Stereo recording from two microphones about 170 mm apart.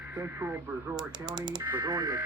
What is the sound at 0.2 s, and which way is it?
Speech, 15° right (ahead or behind).